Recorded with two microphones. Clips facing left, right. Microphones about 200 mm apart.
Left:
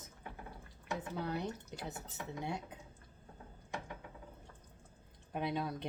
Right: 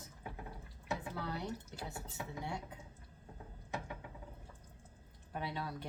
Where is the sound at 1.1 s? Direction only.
20° left (ahead or behind).